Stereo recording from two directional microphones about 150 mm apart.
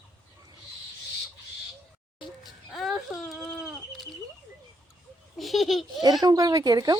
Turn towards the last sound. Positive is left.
turn(degrees=-25)  # may be behind; listen again after turning